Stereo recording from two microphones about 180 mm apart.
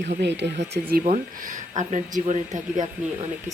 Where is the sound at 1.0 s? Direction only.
40° right (ahead or behind).